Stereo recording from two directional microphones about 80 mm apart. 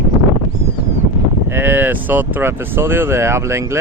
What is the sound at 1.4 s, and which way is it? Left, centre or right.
Speech, right.